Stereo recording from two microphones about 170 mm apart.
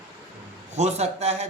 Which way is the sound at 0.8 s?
40° right (ahead or behind).